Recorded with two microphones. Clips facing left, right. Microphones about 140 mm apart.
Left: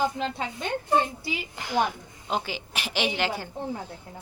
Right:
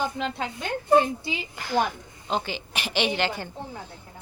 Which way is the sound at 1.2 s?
25° right (ahead or behind).